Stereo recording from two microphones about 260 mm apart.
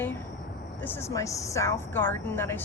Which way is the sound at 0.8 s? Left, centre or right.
Centre.